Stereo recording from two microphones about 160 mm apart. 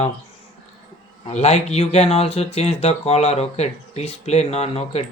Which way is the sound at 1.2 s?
45° left (ahead or behind).